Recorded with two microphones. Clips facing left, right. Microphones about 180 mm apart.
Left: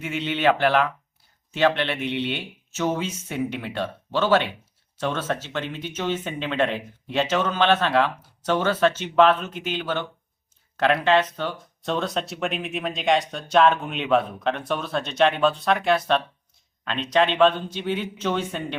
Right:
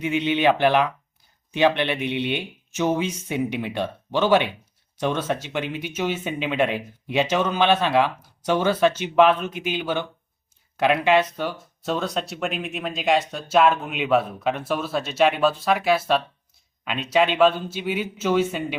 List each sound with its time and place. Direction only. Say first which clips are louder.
0.0 s speech: right 2 dB; 15° right (ahead or behind)